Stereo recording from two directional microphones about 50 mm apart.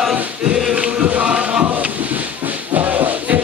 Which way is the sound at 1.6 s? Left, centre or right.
Right.